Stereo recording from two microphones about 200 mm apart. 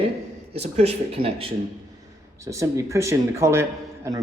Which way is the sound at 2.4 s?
15° right (ahead or behind).